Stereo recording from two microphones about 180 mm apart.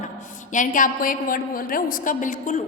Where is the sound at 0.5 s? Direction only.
45° left (ahead or behind).